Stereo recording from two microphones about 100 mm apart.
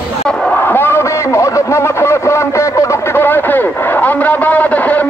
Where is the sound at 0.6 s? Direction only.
20° left (ahead or behind).